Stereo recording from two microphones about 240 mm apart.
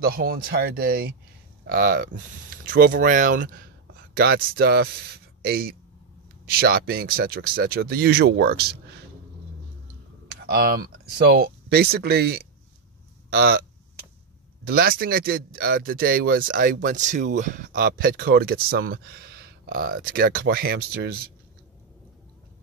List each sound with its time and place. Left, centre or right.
0.0 s a man's voice: right
10.2 s speech: right
14.7 s a man's voice: right